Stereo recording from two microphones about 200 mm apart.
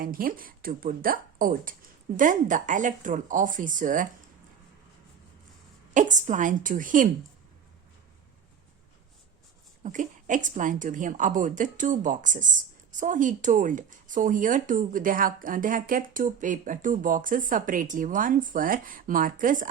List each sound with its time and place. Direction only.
0.0 s a woman's voice: 45° right (ahead or behind)
5.9 s a woman's voice: 40° right (ahead or behind)
9.8 s a woman's voice: 40° right (ahead or behind)